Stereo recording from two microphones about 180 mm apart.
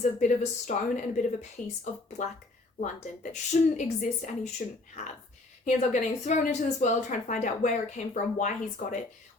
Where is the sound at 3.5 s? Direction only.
45° left (ahead or behind).